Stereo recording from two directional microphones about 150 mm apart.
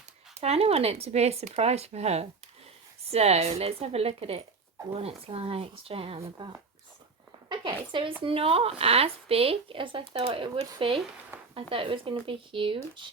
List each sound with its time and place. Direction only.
0.3 s speech: 45° right (ahead or behind)
11.3 s a sound: 15° right (ahead or behind)
11.7 s speech: 35° right (ahead or behind)